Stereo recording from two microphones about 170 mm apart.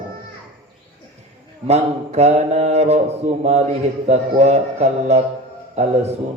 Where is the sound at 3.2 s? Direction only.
45° right (ahead or behind).